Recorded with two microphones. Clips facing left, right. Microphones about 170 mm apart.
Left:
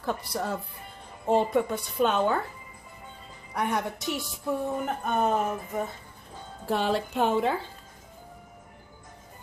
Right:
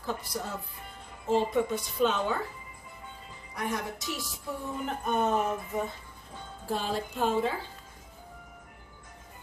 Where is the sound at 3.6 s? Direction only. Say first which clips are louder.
Left 5 dB; 65° left (ahead or behind).